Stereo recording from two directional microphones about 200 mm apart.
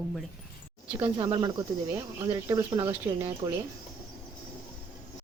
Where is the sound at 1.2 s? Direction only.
20° right (ahead or behind).